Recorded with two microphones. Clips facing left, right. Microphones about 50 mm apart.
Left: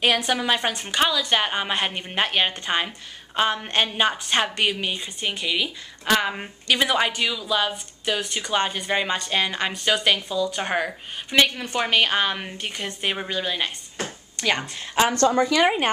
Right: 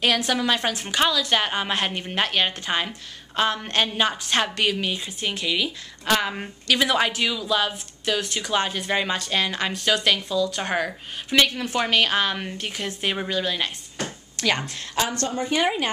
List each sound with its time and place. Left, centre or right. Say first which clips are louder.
0.0 s a woman's voice: even; centre
15.0 s a woman's voice: left 8 dB; left
15.6 s speech: left 3 dB; left